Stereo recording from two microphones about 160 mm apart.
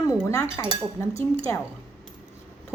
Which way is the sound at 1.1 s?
35° right (ahead or behind).